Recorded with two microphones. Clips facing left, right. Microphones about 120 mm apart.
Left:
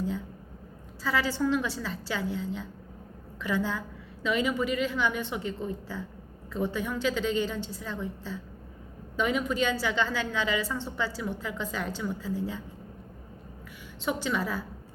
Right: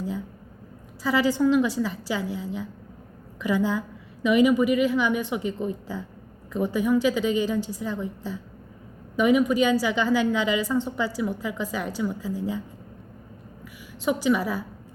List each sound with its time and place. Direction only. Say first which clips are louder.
1.0 s a woman's voice: right 6 dB; 15° right (ahead or behind)
14.0 s a woman's voice: right 7 dB; 10° right (ahead or behind)